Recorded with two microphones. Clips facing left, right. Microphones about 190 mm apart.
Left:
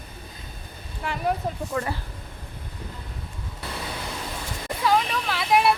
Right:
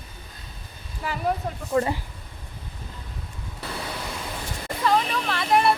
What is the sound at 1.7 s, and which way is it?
Speech, 25° right (ahead or behind).